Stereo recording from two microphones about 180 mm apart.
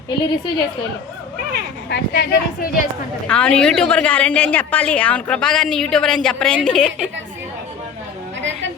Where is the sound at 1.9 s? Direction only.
65° left (ahead or behind).